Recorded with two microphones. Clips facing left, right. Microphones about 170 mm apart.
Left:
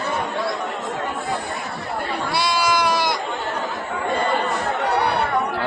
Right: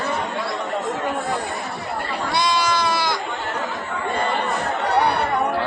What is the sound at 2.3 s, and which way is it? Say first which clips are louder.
Goat: even; 5° left (ahead or behind).